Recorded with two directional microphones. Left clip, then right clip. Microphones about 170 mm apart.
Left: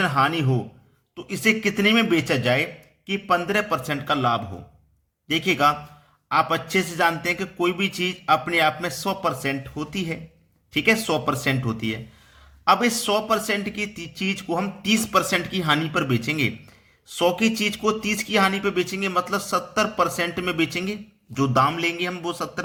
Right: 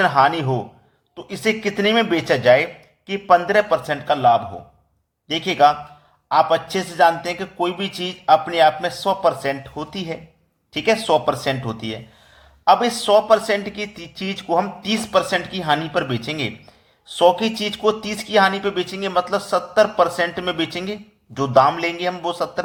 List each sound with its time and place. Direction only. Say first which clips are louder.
0.0 s speech: right 5 dB; 15° left (ahead or behind)
6.9 s speech: right 9 dB; 25° left (ahead or behind)
13.1 s speech: right 11 dB; 20° left (ahead or behind)